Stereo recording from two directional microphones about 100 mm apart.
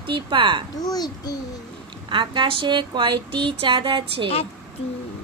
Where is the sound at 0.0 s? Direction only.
55° right (ahead or behind).